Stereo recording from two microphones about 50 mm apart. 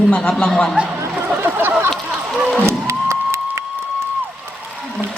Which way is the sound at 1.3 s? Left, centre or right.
Right.